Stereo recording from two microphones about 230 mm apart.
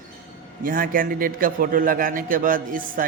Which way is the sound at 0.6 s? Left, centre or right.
Right.